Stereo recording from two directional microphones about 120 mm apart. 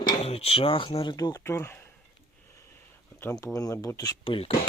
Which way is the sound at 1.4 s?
20° left (ahead or behind).